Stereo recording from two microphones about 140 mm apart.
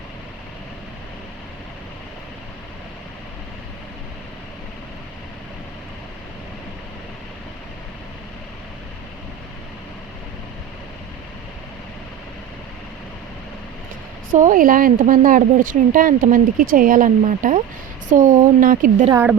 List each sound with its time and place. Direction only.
14.3 s a woman's voice: 65° right (ahead or behind)
19.1 s a woman's voice: 10° right (ahead or behind)